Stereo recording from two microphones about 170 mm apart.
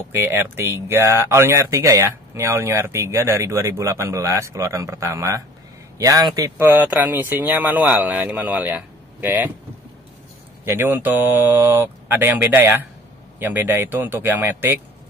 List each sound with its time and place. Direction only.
0.1 s speech: 15° right (ahead or behind)
10.6 s speech: 15° right (ahead or behind)